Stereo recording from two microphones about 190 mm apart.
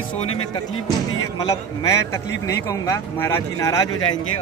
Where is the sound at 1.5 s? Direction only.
15° left (ahead or behind).